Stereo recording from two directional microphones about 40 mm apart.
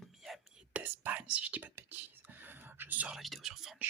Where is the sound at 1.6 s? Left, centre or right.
Right.